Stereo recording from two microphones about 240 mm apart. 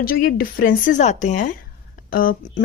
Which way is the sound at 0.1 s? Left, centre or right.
Left.